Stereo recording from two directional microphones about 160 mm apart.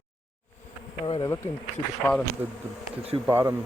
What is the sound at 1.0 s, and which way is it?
Bee, 30° left (ahead or behind).